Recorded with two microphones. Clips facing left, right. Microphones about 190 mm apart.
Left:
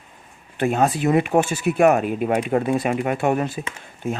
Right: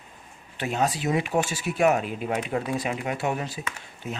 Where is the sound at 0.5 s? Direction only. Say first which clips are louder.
Left 7 dB; 50° left (ahead or behind).